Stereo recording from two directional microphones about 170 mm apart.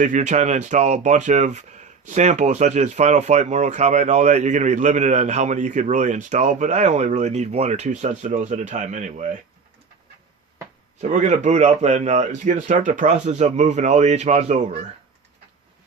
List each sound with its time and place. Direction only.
0.0 s speech: 45° right (ahead or behind)
11.0 s speech: 45° right (ahead or behind)